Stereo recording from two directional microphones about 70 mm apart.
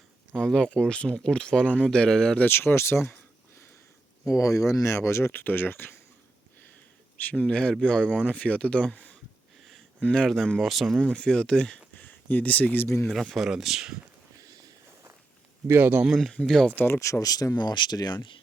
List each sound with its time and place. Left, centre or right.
0.3 s speech: centre
2.4 s speech: left
4.3 s speech: left
5.3 s speech: left
7.3 s speech: centre
11.0 s speech: centre
11.9 s speech: left
13.1 s speech: centre
15.8 s speech: right
16.0 s speech: centre
16.6 s speech: left
17.0 s speech: left